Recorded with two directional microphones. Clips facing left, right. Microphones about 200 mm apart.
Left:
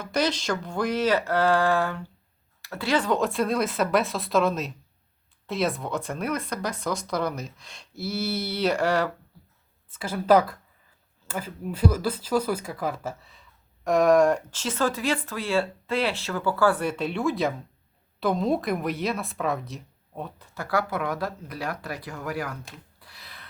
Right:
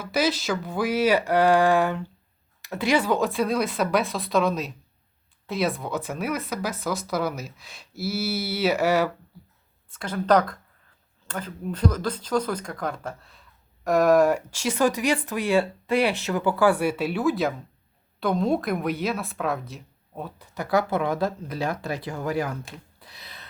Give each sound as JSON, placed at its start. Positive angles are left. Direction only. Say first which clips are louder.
{"t": 0.0, "sound": "speech", "louder": "right 1 dB", "side_deg": -5}
{"t": 9.9, "sound": "speech", "louder": "left 1 dB", "side_deg": 5}
{"t": 20.4, "sound": "speech", "louder": "right 4 dB", "side_deg": -15}
{"t": 23.0, "sound": "a sound", "louder": "right 2 dB", "side_deg": -20}